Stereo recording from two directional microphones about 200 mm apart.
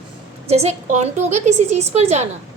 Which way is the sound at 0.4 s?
30° right (ahead or behind).